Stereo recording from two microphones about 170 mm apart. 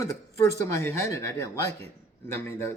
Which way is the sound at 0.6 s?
15° left (ahead or behind).